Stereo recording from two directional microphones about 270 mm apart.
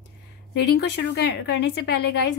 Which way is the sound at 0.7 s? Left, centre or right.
Left.